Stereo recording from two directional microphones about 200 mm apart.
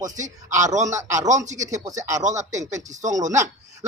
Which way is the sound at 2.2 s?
35° right (ahead or behind).